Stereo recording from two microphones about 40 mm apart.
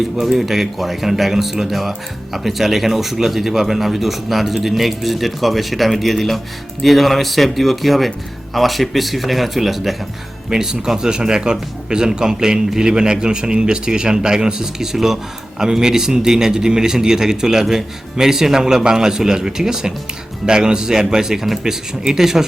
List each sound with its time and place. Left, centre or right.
0.2 s a man's voice: centre